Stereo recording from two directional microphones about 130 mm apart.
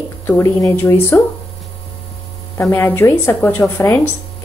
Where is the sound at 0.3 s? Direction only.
20° left (ahead or behind).